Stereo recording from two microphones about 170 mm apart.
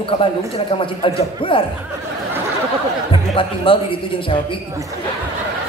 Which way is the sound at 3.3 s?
30° left (ahead or behind).